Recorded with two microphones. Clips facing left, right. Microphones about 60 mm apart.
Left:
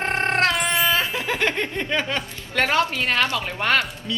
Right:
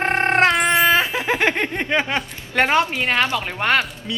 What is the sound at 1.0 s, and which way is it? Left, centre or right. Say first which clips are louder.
Speech: right 4 dB; right.